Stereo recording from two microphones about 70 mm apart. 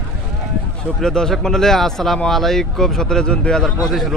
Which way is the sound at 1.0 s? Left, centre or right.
Centre.